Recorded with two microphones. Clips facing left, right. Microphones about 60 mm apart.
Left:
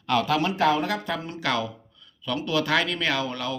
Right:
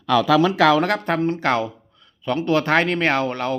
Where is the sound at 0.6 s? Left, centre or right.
Right.